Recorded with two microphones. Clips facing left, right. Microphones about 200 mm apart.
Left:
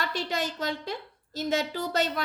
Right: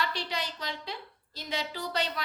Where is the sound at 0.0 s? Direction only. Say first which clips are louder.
Left 4 dB; 45° left (ahead or behind).